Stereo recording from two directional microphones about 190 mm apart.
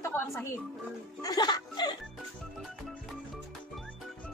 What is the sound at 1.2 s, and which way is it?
Music, 20° left (ahead or behind).